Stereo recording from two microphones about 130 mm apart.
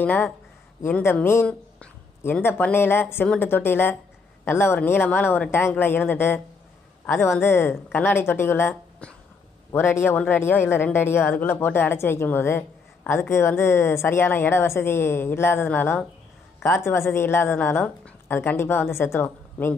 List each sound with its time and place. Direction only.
0.0 s a man's voice: 15° left (ahead or behind)